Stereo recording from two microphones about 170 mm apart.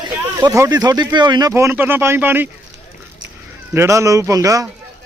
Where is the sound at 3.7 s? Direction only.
15° right (ahead or behind).